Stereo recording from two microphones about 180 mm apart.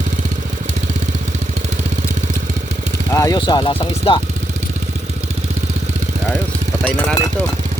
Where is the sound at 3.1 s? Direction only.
20° left (ahead or behind).